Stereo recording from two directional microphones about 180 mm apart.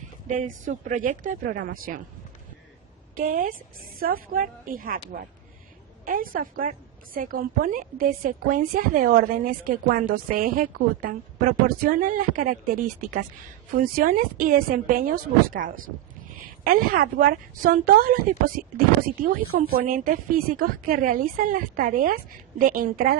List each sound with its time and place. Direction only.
0.3 s a woman's voice: 45° right (ahead or behind)
3.2 s a woman's voice: 50° right (ahead or behind)